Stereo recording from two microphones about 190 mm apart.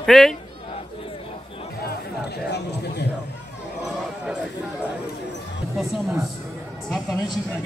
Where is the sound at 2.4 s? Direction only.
60° left (ahead or behind).